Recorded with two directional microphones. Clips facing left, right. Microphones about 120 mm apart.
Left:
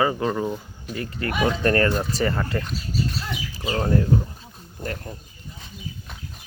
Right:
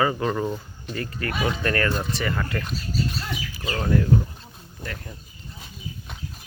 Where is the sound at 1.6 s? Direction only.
30° left (ahead or behind).